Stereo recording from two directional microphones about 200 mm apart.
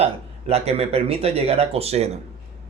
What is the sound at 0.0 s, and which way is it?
Speech, 30° right (ahead or behind).